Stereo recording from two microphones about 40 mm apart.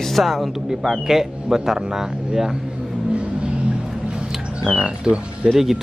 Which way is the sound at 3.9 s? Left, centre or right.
Centre.